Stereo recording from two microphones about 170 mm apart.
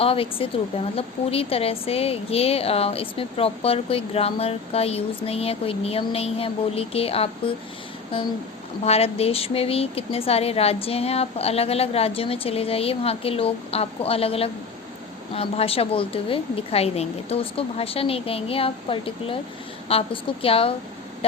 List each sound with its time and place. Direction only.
0.0 s speech: 35° left (ahead or behind)
8.8 s speech: 35° left (ahead or behind)